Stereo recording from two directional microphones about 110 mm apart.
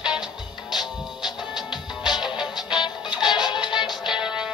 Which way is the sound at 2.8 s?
45° left (ahead or behind).